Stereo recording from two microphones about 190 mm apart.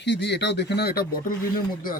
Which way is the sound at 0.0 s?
65° left (ahead or behind).